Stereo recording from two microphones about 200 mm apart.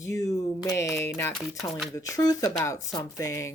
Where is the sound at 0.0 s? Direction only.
15° left (ahead or behind).